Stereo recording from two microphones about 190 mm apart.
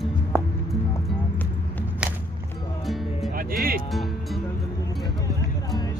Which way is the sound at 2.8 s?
Centre (ahead or behind).